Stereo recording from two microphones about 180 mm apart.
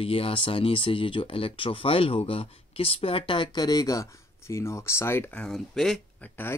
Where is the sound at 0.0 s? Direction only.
30° left (ahead or behind).